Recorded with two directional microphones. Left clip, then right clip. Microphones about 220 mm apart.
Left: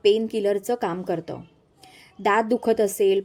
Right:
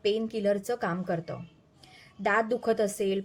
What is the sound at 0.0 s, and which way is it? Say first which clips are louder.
A woman's voice: left 8 dB; 30° left (ahead or behind).